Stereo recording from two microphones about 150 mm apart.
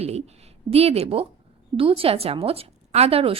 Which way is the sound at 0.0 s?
45° right (ahead or behind).